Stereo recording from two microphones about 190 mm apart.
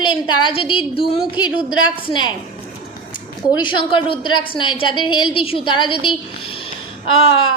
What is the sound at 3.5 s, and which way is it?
A woman's voice, 25° left (ahead or behind).